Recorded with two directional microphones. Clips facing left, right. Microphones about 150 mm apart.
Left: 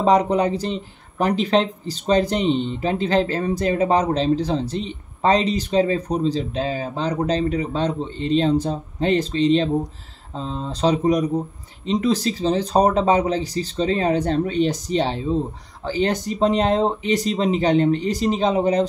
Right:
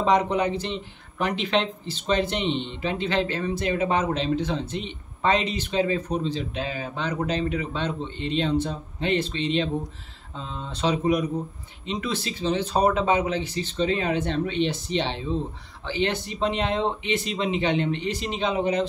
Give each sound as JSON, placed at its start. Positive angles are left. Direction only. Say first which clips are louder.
{"t": 0.0, "sound": "speech", "louder": "left 4 dB", "side_deg": 35}